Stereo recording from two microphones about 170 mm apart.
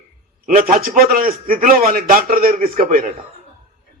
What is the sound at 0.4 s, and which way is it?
A man's voice, 55° right (ahead or behind).